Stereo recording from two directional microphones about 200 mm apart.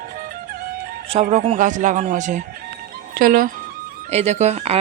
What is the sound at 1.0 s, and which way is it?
Speech, 30° right (ahead or behind).